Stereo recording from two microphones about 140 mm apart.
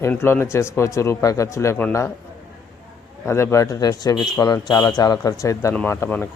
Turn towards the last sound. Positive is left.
turn(degrees=15)  # may be behind; listen again after turning